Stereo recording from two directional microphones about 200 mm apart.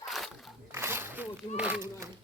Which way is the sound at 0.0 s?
Centre (ahead or behind).